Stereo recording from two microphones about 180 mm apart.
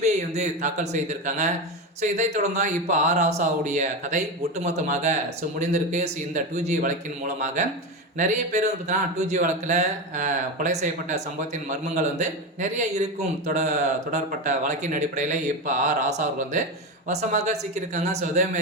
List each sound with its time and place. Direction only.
0.0 s speech: 40° right (ahead or behind)